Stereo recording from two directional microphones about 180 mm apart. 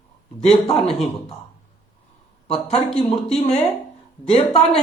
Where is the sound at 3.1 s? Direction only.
35° left (ahead or behind).